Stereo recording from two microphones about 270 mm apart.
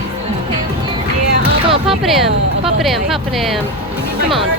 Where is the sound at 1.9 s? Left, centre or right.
Centre.